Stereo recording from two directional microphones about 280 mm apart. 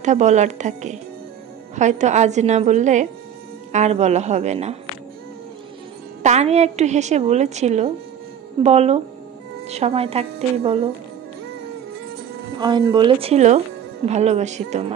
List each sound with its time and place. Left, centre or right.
0.0 s a woman's voice: right
6.2 s a woman's voice: right
12.5 s a woman's voice: centre